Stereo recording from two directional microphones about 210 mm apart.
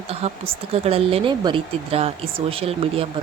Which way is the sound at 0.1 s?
30° right (ahead or behind).